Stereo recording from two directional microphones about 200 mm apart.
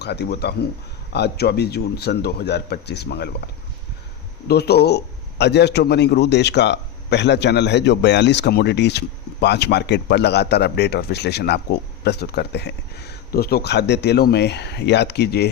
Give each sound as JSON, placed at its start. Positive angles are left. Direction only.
{"t": 0.0, "sound": "a man's voice", "side_deg": 55}